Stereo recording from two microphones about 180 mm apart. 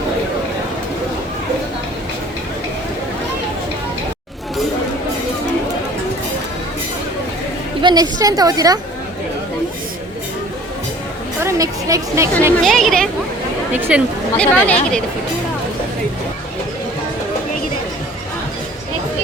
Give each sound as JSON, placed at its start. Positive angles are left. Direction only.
{"t": 7.8, "sound": "a sound", "side_deg": -25}
{"t": 8.2, "sound": "a woman's voice", "side_deg": -20}
{"t": 11.3, "sound": "a woman's voice", "side_deg": -15}
{"t": 12.6, "sound": "speech", "side_deg": 0}
{"t": 13.7, "sound": "speech", "side_deg": -10}
{"t": 14.3, "sound": "speech", "side_deg": 5}